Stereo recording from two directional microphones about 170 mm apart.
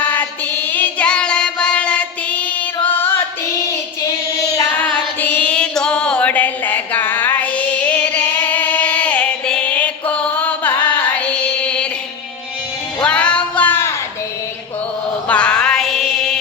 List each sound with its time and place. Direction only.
0.0 s music: 10° left (ahead or behind)
2.8 s singing: 10° left (ahead or behind)
3.7 s child singing: 20° left (ahead or behind)
4.8 s female singing: 10° left (ahead or behind)
13.1 s a sound: 5° left (ahead or behind)
15.3 s music: 5° left (ahead or behind)